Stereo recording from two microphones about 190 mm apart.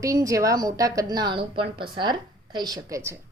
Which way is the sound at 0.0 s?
15° right (ahead or behind).